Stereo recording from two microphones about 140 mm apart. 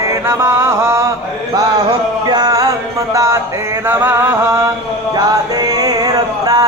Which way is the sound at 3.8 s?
15° right (ahead or behind).